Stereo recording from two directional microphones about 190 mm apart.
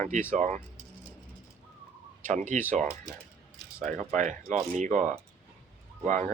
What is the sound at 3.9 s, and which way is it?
Speech, 40° right (ahead or behind).